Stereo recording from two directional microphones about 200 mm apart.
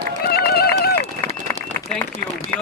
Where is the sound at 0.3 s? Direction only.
50° left (ahead or behind).